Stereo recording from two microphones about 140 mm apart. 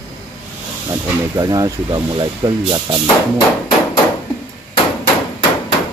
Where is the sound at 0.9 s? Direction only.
25° right (ahead or behind).